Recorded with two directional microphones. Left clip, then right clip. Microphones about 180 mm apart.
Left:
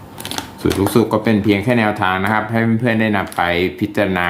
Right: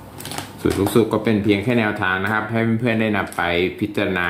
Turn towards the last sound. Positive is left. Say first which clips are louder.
# left 4 dB
turn(degrees=25)  # may be behind; listen again after turning